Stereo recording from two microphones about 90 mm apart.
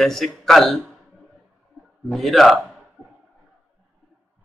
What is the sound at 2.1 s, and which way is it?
Speech, centre (ahead or behind).